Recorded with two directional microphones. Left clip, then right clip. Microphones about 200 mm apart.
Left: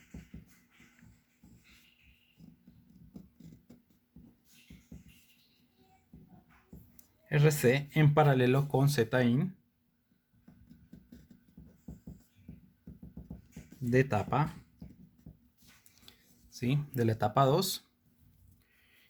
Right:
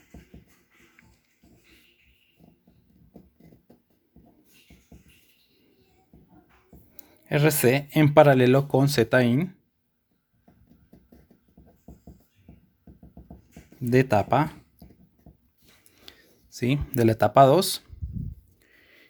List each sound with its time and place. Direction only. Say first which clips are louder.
6.9 s speech: right 8 dB; 40° right (ahead or behind)
13.9 s speech: right 9 dB; 40° right (ahead or behind)
16.0 s speech: right 11 dB; 35° right (ahead or behind)
18.7 s a sound: right 10 dB; 35° right (ahead or behind)